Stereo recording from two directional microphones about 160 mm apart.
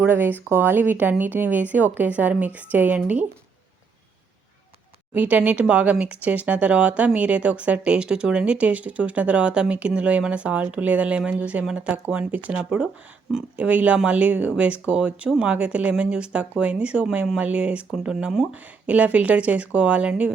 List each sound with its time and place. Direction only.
0.0 s speech: 10° right (ahead or behind)
5.1 s speech: 10° right (ahead or behind)